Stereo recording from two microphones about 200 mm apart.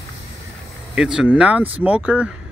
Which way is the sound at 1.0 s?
5° right (ahead or behind).